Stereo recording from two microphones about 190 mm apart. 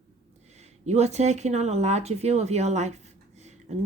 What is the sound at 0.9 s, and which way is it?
Speech, 35° right (ahead or behind).